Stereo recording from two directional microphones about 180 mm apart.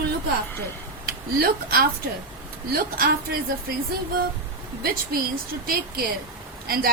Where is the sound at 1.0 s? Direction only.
55° right (ahead or behind).